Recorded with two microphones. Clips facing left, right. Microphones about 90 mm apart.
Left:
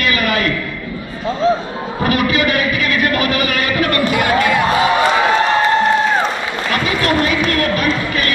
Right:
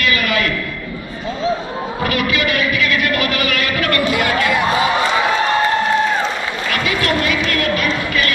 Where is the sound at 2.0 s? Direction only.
35° left (ahead or behind).